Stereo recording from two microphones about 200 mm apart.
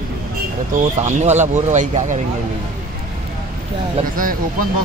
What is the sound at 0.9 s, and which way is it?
Speech, 35° right (ahead or behind).